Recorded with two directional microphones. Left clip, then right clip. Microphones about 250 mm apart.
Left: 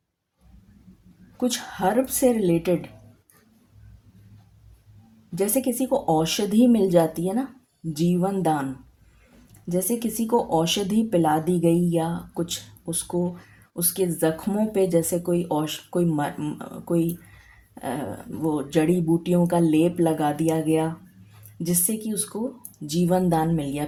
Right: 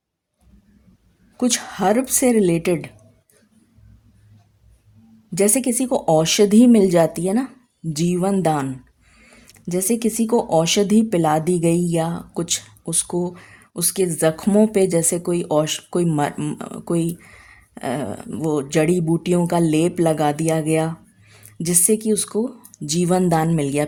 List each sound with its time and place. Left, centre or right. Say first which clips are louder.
1.4 s speech: right 4 dB; right
5.3 s speech: right 5 dB; right
9.6 s speech: right 5 dB; right